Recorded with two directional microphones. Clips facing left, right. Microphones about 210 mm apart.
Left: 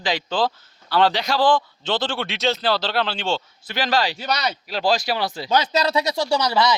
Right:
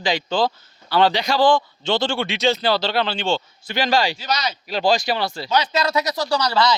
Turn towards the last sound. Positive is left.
turn(degrees=20)  # may be behind; listen again after turning